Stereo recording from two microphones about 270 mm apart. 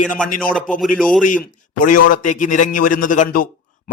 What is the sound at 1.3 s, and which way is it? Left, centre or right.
A man's voice, left.